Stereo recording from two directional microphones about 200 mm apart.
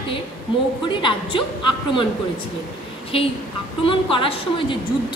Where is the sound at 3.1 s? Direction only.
30° left (ahead or behind).